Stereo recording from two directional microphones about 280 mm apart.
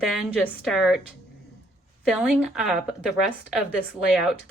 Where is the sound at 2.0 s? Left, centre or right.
Centre.